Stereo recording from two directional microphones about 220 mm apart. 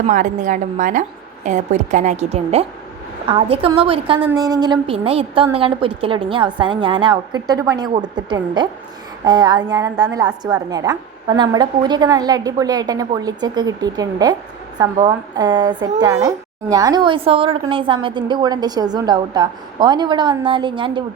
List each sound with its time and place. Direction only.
0.1 s a woman's voice: 35° right (ahead or behind); by 21.0 s 20° right (ahead or behind)